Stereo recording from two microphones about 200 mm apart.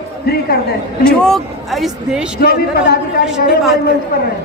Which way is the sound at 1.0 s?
5° left (ahead or behind).